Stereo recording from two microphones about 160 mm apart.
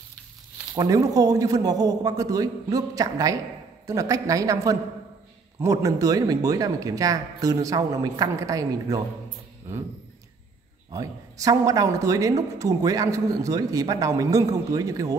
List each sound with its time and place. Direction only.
0.7 s speech: 20° right (ahead or behind)
10.9 s speech: 20° right (ahead or behind)